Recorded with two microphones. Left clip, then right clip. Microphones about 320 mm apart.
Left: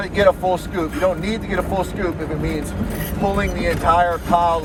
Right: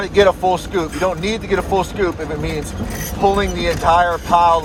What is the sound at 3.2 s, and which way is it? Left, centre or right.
Speech, right.